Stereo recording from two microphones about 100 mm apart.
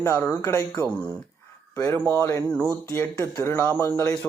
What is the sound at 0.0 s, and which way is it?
Speech, 25° left (ahead or behind).